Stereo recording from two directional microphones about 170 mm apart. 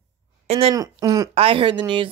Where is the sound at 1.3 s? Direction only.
35° right (ahead or behind).